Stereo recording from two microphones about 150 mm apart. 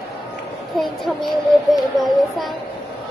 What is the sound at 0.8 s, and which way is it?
A child's voice, centre (ahead or behind).